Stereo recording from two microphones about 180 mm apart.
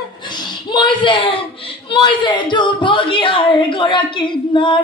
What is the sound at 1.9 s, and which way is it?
Speech, 25° left (ahead or behind).